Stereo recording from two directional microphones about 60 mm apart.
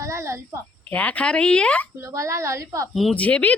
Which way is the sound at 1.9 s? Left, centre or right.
Right.